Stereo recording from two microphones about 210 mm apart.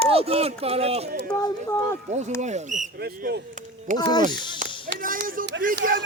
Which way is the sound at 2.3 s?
35° right (ahead or behind).